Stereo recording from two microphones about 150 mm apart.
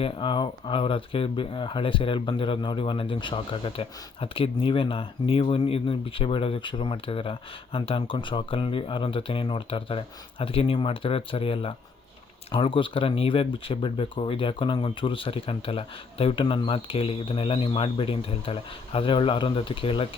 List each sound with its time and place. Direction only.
0.0 s speech: 30° left (ahead or behind)